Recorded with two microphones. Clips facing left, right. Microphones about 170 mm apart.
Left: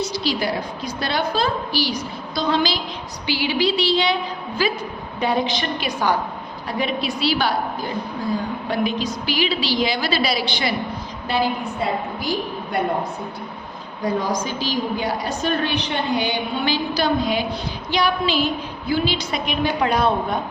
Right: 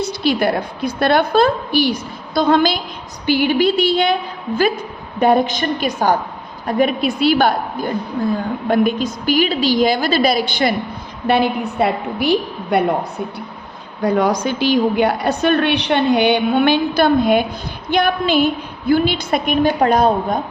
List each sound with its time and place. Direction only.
0.0 s a woman's voice: 55° right (ahead or behind)
11.3 s a woman's voice: 65° right (ahead or behind)
14.0 s a woman's voice: 65° right (ahead or behind); by 20.4 s 45° right (ahead or behind)